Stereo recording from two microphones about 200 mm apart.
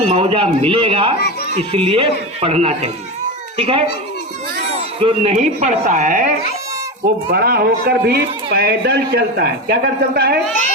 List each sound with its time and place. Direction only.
0.1 s speech: 25° right (ahead or behind)
4.9 s speech: 30° right (ahead or behind)
7.3 s speech: 50° right (ahead or behind)